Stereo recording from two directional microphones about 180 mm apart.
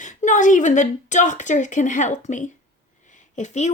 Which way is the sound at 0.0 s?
45° left (ahead or behind).